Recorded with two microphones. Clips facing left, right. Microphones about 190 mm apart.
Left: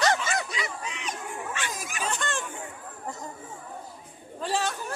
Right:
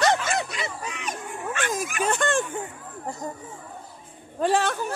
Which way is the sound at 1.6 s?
55° right (ahead or behind).